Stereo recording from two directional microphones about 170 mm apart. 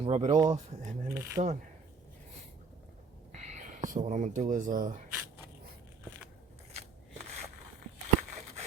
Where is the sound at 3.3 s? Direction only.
45° right (ahead or behind).